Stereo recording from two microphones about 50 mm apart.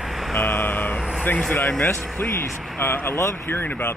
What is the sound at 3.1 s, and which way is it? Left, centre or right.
Speech, left.